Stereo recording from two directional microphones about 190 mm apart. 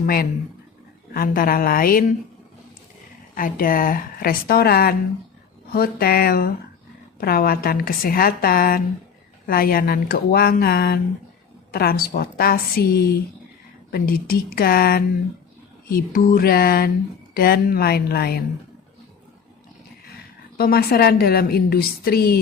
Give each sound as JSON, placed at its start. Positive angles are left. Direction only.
{"t": 0.0, "sound": "speech", "side_deg": 50}
{"t": 3.3, "sound": "a woman's voice", "side_deg": 45}
{"t": 20.6, "sound": "a woman's voice", "side_deg": 55}